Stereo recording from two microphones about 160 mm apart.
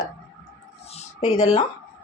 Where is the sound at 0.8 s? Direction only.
45° left (ahead or behind).